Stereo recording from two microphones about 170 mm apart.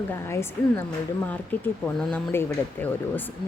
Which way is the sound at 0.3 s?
15° left (ahead or behind).